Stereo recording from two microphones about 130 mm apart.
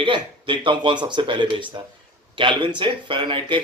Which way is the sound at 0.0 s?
40° right (ahead or behind).